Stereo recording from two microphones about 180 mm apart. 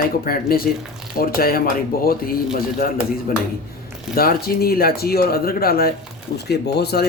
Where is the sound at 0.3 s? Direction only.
55° left (ahead or behind).